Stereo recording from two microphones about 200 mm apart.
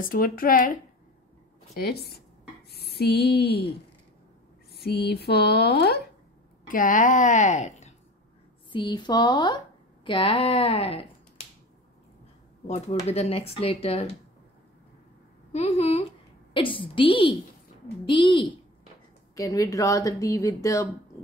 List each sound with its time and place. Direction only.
0.1 s speech: 45° left (ahead or behind)
4.8 s speech: 55° left (ahead or behind)
6.7 s a woman's voice: 40° left (ahead or behind)
8.7 s speech: 20° left (ahead or behind)
12.6 s a woman's voice: 35° left (ahead or behind)
15.5 s a woman's voice: 30° left (ahead or behind)